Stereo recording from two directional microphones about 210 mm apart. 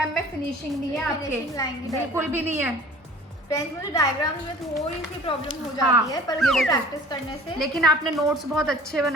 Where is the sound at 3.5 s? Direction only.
15° left (ahead or behind).